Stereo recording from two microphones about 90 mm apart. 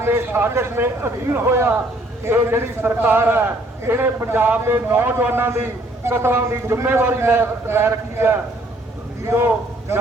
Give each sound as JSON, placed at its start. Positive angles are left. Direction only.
{"t": 0.0, "sound": "a man's voice", "side_deg": -25}